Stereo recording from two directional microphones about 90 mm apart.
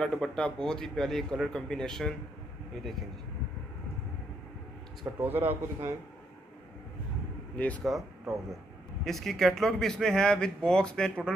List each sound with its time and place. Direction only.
0.0 s speech: 10° left (ahead or behind)
5.0 s a man's voice: 20° right (ahead or behind)
7.5 s speech: 15° left (ahead or behind)
7.8 s speech: centre (ahead or behind)